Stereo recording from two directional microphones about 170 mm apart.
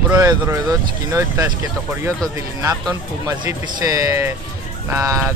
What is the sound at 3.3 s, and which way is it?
Speech, 20° right (ahead or behind).